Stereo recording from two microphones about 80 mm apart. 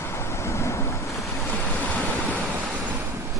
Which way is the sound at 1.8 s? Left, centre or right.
Centre.